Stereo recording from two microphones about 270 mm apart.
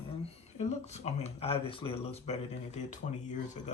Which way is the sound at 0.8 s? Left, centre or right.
Left.